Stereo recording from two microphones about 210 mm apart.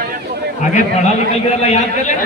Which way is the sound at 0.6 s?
35° left (ahead or behind).